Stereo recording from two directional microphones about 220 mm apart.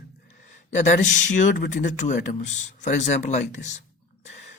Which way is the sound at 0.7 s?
35° left (ahead or behind).